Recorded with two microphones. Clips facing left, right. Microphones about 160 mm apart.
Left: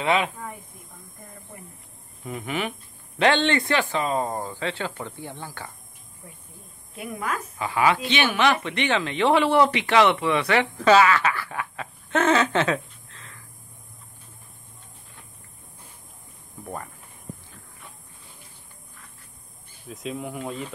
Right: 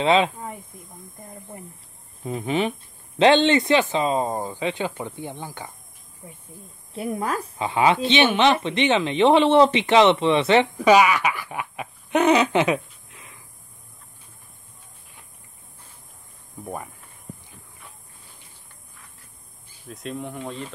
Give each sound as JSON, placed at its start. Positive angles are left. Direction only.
{"t": 0.0, "sound": "speech", "side_deg": -25}
{"t": 2.2, "sound": "a woman's voice", "side_deg": -25}
{"t": 6.9, "sound": "a woman's voice", "side_deg": -30}
{"t": 16.6, "sound": "speech", "side_deg": -10}
{"t": 19.9, "sound": "speech", "side_deg": 0}